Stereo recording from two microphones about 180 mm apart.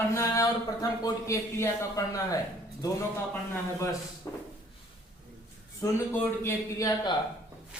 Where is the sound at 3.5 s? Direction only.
15° left (ahead or behind).